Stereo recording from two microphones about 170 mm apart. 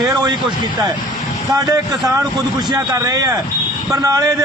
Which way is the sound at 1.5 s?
25° right (ahead or behind).